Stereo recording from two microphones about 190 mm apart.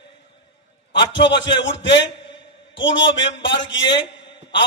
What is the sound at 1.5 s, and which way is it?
A man's voice, 70° left (ahead or behind).